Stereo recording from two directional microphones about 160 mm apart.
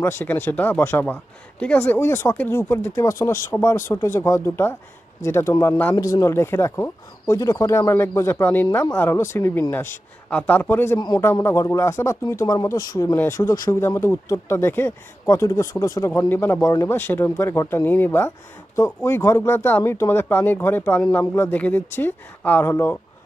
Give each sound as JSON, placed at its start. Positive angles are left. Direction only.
{"t": 0.0, "sound": "speech", "side_deg": 15}
{"t": 11.0, "sound": "a man's voice", "side_deg": 25}